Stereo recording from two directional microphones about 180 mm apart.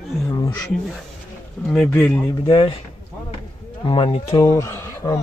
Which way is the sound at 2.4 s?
30° left (ahead or behind).